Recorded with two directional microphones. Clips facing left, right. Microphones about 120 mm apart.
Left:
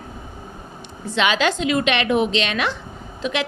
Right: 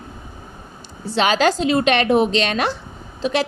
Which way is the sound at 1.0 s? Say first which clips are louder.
Right 3 dB; 35° right (ahead or behind).